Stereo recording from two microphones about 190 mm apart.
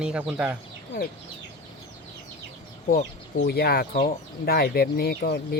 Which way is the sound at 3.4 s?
55° left (ahead or behind).